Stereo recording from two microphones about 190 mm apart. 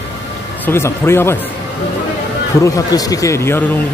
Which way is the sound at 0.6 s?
15° left (ahead or behind).